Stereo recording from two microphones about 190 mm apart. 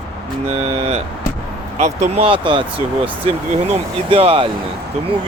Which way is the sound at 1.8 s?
35° right (ahead or behind).